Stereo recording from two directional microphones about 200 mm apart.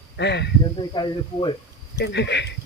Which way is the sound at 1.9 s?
60° left (ahead or behind).